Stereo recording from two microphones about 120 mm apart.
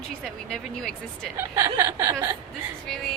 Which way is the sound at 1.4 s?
20° right (ahead or behind).